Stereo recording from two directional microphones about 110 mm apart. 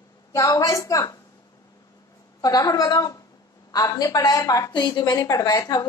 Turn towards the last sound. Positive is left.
turn(degrees=35)  # may be behind; listen again after turning